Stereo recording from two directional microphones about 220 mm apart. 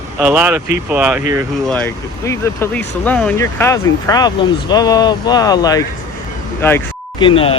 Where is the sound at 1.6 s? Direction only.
5° left (ahead or behind).